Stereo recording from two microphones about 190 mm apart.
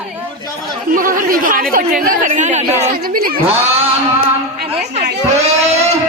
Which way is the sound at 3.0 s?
50° right (ahead or behind).